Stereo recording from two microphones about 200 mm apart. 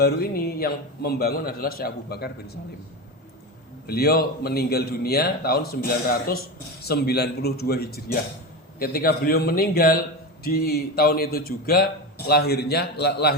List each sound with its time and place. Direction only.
0.0 s a man's voice: 50° left (ahead or behind)
3.8 s a man's voice: 50° left (ahead or behind)